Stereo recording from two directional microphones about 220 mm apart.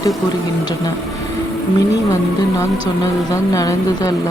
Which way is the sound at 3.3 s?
15° left (ahead or behind).